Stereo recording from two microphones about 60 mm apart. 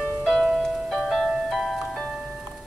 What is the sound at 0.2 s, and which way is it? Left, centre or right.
Music, centre.